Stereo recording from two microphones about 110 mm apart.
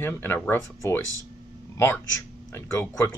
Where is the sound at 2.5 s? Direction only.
25° left (ahead or behind).